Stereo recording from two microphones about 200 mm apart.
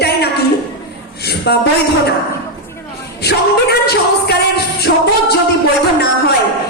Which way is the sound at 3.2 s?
55° left (ahead or behind).